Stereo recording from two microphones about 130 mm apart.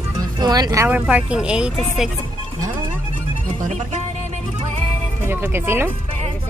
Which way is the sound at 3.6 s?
70° right (ahead or behind).